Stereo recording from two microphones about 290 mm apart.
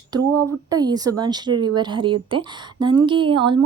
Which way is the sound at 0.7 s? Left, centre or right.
Centre.